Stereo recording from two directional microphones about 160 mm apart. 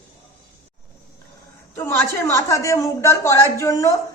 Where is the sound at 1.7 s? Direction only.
15° left (ahead or behind).